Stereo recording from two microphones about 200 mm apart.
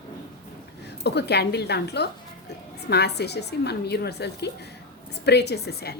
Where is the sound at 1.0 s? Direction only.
55° left (ahead or behind).